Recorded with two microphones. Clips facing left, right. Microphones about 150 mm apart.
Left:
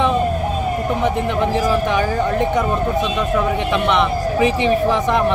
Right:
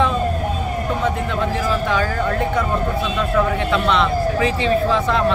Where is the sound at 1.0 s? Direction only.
20° left (ahead or behind).